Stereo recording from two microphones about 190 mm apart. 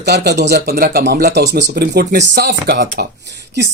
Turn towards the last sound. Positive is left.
turn(degrees=-65)  # may be behind; listen again after turning